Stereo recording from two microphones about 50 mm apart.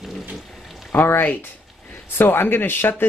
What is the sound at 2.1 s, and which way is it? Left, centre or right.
Speech, left.